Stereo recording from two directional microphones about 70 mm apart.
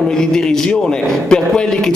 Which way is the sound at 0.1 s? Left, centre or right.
Centre.